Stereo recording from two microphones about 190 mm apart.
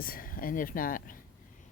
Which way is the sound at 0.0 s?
50° left (ahead or behind).